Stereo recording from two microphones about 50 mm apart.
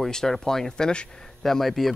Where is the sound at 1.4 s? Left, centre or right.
Centre.